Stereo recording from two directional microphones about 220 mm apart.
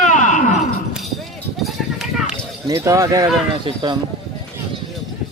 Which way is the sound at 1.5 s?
Centre (ahead or behind).